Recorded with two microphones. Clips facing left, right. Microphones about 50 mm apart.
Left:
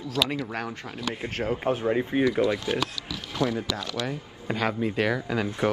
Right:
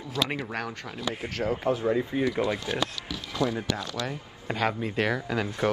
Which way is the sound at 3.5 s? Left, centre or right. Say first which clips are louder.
Even; right.